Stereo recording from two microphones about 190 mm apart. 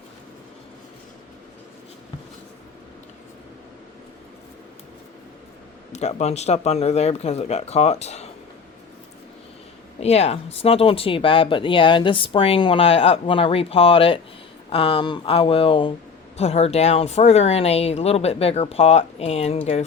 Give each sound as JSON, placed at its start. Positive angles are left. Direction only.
{"t": 5.9, "sound": "speech", "side_deg": 35}
{"t": 10.0, "sound": "speech", "side_deg": 35}